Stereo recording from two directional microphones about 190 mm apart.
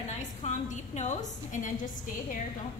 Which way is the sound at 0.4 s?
40° left (ahead or behind).